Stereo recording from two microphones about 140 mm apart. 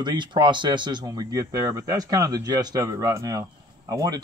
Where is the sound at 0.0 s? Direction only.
35° right (ahead or behind).